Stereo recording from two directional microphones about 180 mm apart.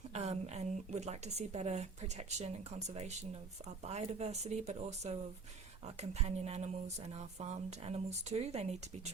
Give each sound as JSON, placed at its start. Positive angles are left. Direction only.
{"t": 0.1, "sound": "speech", "side_deg": -35}